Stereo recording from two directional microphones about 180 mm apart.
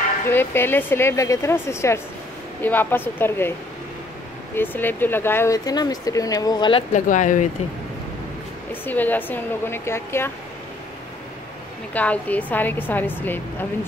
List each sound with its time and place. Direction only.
0.3 s a woman's voice: 10° left (ahead or behind)
4.6 s speech: 10° left (ahead or behind)
6.9 s speech: 45° left (ahead or behind)
8.8 s a woman's voice: 10° left (ahead or behind)
11.9 s a woman's voice: 10° left (ahead or behind)